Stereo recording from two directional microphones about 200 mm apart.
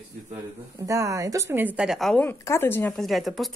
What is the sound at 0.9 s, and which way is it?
A woman's voice, 15° right (ahead or behind).